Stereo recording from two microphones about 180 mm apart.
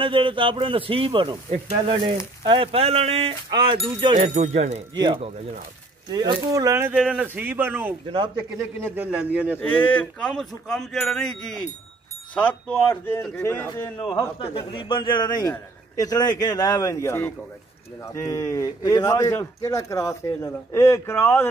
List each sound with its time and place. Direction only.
0.0 s a man's voice: 30° right (ahead or behind)
4.2 s speech: 40° right (ahead or behind)
4.9 s a man's voice: 25° right (ahead or behind)
8.1 s a man's voice: 25° right (ahead or behind)
8.9 s speech: 5° right (ahead or behind)
9.6 s speech: 10° left (ahead or behind)
14.4 s speech: 30° left (ahead or behind)